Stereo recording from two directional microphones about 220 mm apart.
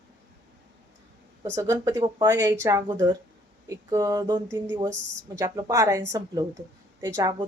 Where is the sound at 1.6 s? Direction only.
15° right (ahead or behind).